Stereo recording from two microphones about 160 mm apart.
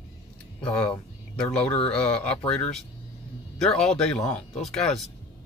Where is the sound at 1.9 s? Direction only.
5° left (ahead or behind).